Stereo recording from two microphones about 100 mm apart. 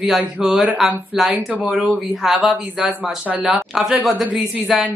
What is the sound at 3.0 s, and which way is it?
Speech, 15° right (ahead or behind).